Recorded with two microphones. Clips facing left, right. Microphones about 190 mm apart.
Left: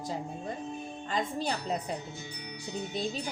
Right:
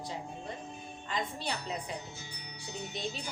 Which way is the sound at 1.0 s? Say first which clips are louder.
Left 4 dB; 45° left (ahead or behind).